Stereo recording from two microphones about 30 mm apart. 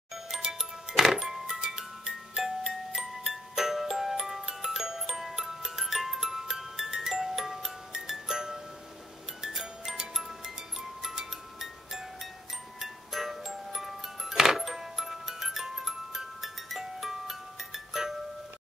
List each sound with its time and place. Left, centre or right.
0.1 s music: centre